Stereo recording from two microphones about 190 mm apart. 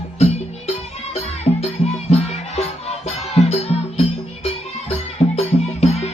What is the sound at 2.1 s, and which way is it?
Music, 35° left (ahead or behind).